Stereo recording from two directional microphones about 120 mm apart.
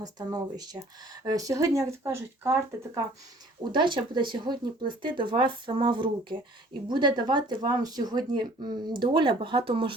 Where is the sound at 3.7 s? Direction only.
40° right (ahead or behind).